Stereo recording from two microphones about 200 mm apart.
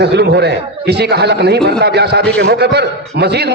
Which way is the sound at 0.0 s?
55° right (ahead or behind).